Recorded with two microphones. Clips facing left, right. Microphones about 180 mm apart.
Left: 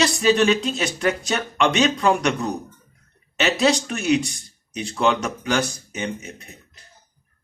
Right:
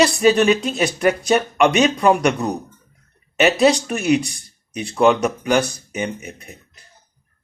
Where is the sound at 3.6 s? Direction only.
5° right (ahead or behind).